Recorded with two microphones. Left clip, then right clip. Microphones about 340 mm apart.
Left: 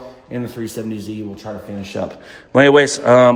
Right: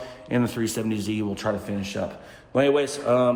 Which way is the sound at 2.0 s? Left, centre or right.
Left.